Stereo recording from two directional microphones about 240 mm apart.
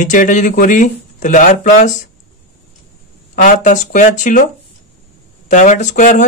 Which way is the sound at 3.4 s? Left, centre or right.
Left.